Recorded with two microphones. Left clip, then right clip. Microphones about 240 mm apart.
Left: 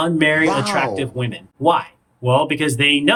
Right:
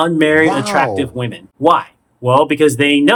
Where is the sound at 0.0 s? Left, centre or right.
Centre.